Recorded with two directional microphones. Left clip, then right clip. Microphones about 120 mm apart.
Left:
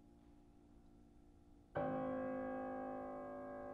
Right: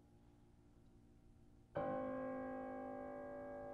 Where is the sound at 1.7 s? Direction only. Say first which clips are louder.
Left 1 dB; 15° left (ahead or behind).